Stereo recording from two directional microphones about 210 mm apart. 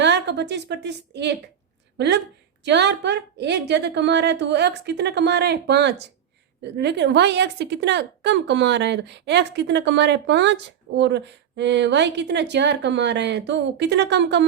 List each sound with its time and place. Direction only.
0.0 s a woman's voice: 55° right (ahead or behind)